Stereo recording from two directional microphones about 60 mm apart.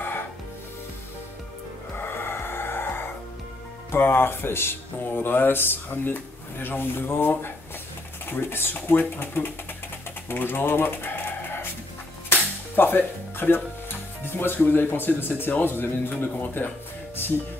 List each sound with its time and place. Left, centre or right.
2.0 s music: left
3.9 s speech: left
10.2 s bird: left
12.3 s speech: left